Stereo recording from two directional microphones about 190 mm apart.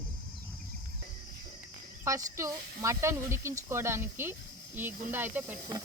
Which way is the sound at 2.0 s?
15° right (ahead or behind).